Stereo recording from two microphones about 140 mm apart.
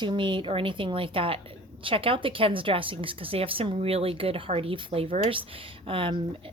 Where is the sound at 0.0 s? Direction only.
35° right (ahead or behind).